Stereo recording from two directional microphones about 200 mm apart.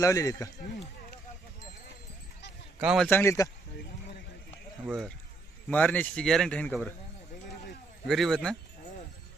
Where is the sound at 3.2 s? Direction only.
15° left (ahead or behind).